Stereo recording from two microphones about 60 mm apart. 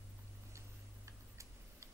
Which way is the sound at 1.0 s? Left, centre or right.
Right.